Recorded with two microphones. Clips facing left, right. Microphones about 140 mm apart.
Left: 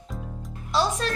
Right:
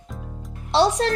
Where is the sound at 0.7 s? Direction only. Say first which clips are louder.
Right 6 dB; 70° right (ahead or behind).